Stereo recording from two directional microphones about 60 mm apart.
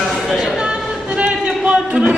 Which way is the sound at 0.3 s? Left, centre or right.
Centre.